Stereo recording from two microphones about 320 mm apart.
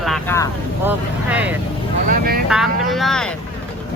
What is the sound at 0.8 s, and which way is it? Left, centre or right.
Speech, centre.